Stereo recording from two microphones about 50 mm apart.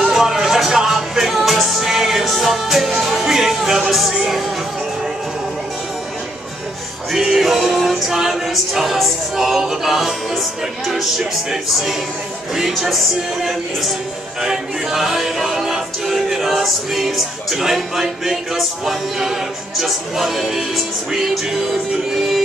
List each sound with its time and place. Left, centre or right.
0.0 s music: centre
7.1 s music: centre